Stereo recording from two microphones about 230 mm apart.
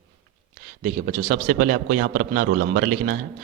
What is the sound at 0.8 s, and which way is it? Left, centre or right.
A man's voice, right.